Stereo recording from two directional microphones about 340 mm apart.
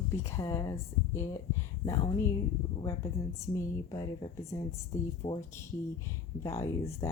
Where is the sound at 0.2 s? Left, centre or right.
Centre.